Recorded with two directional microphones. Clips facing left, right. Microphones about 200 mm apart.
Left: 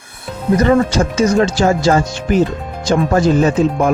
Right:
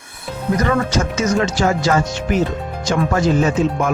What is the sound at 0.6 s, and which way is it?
Speech, 30° left (ahead or behind).